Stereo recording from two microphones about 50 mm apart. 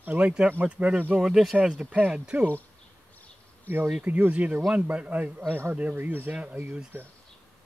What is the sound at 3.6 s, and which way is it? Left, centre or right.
Speech, right.